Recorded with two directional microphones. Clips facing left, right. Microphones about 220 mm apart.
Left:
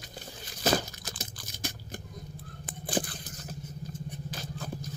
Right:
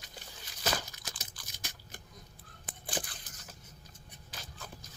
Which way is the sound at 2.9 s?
35° left (ahead or behind).